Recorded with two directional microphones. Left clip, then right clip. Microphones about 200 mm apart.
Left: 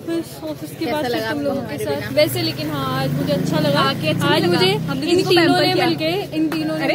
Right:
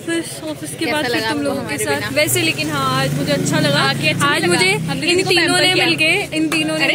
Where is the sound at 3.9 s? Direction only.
30° left (ahead or behind).